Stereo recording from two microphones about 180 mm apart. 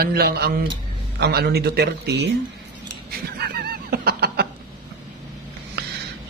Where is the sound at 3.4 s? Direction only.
60° right (ahead or behind).